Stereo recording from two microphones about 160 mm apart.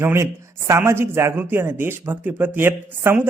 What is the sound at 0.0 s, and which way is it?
Speech, 15° right (ahead or behind).